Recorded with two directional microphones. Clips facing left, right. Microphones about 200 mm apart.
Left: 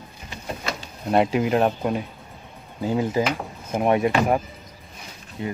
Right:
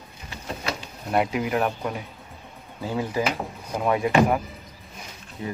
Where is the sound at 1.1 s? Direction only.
25° left (ahead or behind).